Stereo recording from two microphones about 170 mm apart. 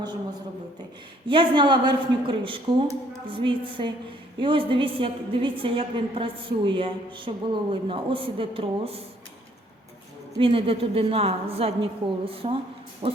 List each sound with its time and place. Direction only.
1.3 s a woman's voice: 30° right (ahead or behind)
10.3 s a woman's voice: 30° right (ahead or behind)